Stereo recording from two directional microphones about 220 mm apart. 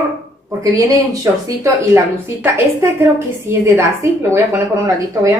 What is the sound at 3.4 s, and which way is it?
A woman's voice, 10° right (ahead or behind).